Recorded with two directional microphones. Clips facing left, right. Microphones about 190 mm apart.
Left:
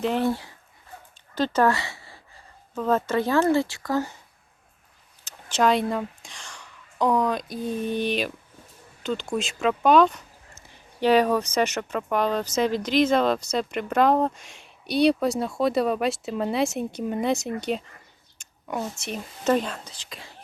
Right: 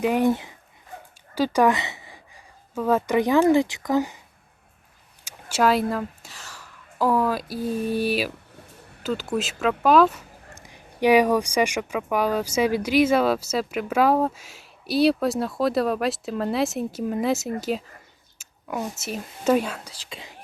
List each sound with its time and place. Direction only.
0.0 s speech: 15° right (ahead or behind)
5.2 s speech: 10° right (ahead or behind)